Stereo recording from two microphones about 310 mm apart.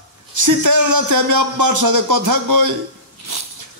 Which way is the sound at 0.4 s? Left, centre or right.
Right.